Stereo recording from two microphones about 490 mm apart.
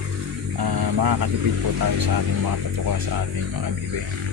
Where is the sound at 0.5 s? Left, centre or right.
Right.